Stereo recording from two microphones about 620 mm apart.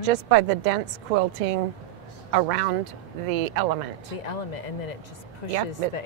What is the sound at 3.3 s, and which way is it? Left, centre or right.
Speech, right.